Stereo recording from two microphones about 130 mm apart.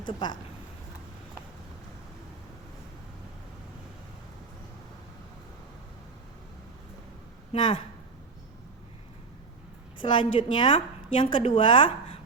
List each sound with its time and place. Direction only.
0.0 s a woman's voice: 35° left (ahead or behind)
7.5 s a woman's voice: 35° left (ahead or behind)
10.0 s a woman's voice: 40° left (ahead or behind)